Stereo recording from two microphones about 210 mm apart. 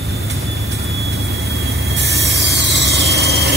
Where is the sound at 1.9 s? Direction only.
50° right (ahead or behind).